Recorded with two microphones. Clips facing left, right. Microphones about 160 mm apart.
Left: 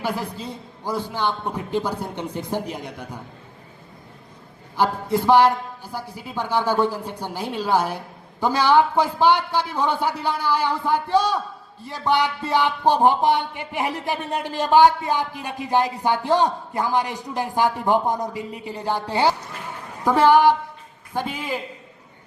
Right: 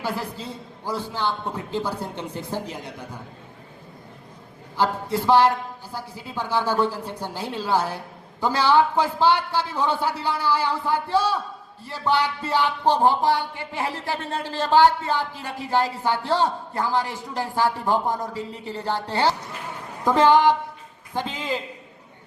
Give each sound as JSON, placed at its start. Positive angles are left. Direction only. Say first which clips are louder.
{"t": 0.0, "sound": "a man's voice", "louder": "left 2 dB", "side_deg": 15}
{"t": 4.8, "sound": "a man's voice", "louder": "left 2 dB", "side_deg": 15}